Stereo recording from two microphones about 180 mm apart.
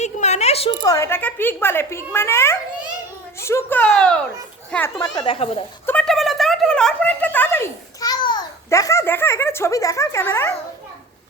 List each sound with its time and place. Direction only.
0.0 s a sound: 40° left (ahead or behind)
0.9 s a woman's voice: 15° left (ahead or behind)
4.9 s speech: 25° left (ahead or behind)
5.8 s a woman's voice: 5° left (ahead or behind)